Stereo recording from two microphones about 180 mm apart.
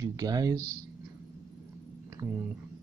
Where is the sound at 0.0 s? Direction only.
20° right (ahead or behind).